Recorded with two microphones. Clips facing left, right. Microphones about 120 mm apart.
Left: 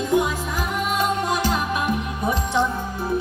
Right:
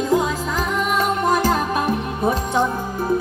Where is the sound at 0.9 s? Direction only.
45° right (ahead or behind).